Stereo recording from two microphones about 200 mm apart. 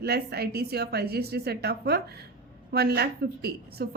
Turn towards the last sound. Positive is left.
turn(degrees=-55)  # may be behind; listen again after turning